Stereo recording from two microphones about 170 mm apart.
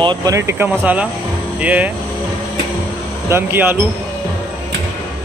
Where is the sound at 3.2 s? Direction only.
15° right (ahead or behind).